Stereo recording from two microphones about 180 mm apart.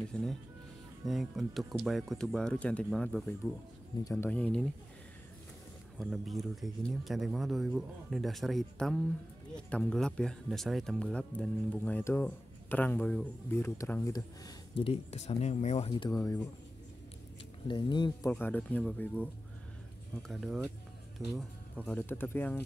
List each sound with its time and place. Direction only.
0.1 s speech: 5° left (ahead or behind)
5.9 s speech: centre (ahead or behind); by 14.9 s 20° left (ahead or behind)
14.9 s speech: 35° left (ahead or behind)
15.9 s speech: 25° left (ahead or behind)
17.6 s speech: 25° left (ahead or behind)
18.3 s speech: 10° left (ahead or behind)